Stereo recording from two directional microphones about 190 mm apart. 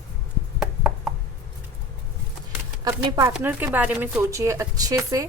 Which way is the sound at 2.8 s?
20° right (ahead or behind).